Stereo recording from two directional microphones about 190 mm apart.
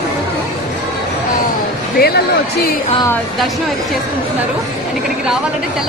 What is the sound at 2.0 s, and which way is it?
Speech, 55° left (ahead or behind).